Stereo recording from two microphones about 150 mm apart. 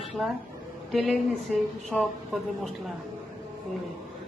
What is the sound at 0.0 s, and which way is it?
Speech, centre (ahead or behind).